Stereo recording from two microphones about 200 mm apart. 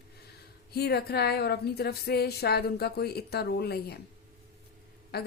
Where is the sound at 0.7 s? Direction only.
55° left (ahead or behind).